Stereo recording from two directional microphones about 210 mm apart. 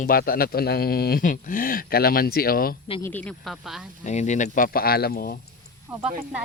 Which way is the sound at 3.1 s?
5° left (ahead or behind).